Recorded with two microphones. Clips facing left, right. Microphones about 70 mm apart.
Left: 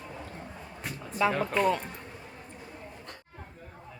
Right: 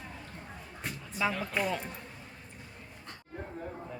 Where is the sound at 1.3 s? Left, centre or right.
Left.